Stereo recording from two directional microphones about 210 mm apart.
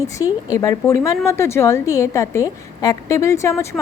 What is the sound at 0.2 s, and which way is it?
A woman's voice, 20° left (ahead or behind).